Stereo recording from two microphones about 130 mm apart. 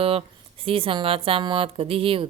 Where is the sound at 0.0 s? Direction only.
45° right (ahead or behind).